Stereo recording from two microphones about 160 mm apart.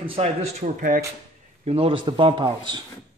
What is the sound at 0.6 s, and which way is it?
Speech, 55° right (ahead or behind).